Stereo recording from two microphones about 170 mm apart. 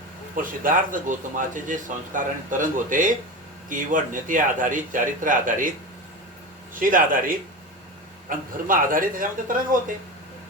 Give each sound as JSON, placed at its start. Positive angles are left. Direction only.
{"t": 0.3, "sound": "speech", "side_deg": -55}
{"t": 6.7, "sound": "speech", "side_deg": -55}